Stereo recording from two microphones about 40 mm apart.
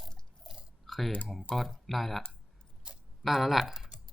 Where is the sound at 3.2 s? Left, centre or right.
Centre.